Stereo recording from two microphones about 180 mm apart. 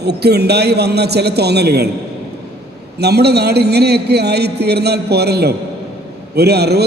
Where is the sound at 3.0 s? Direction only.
65° right (ahead or behind).